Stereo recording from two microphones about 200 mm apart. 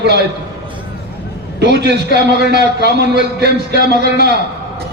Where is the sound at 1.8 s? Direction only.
55° right (ahead or behind).